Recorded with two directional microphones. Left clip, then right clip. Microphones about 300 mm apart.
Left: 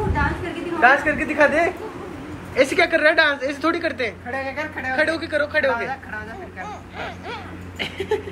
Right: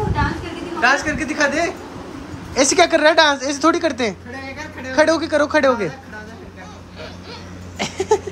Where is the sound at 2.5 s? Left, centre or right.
Centre.